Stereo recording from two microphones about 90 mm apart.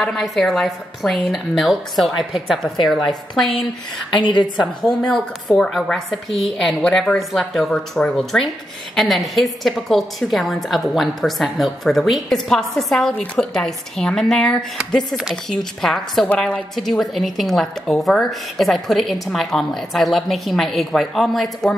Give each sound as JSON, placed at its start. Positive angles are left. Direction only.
{"t": 0.0, "sound": "a woman's voice", "side_deg": 0}
{"t": 4.2, "sound": "a woman's voice", "side_deg": 60}
{"t": 4.6, "sound": "a woman's voice", "side_deg": 0}